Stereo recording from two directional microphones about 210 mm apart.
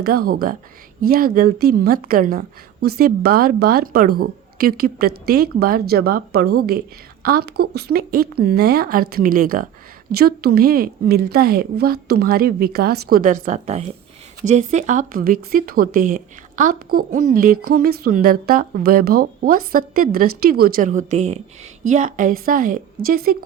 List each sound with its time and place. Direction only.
0.0 s speech: 45° right (ahead or behind)